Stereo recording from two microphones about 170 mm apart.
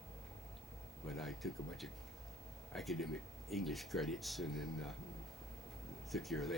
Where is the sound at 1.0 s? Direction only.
Centre (ahead or behind).